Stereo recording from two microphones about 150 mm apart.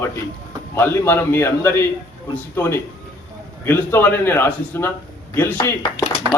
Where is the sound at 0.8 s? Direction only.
15° left (ahead or behind).